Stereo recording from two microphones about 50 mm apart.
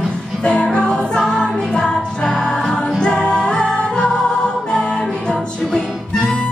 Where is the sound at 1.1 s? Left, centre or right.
Centre.